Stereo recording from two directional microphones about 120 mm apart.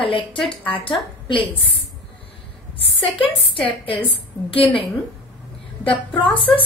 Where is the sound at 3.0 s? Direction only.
45° left (ahead or behind).